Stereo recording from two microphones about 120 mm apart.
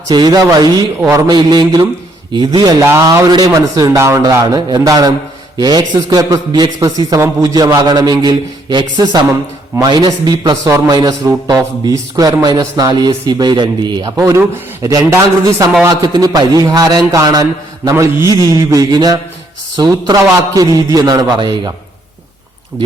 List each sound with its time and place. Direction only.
0.1 s a man's voice: 35° right (ahead or behind)
2.9 s a man's voice: 25° right (ahead or behind)
14.2 s a man's voice: 25° right (ahead or behind)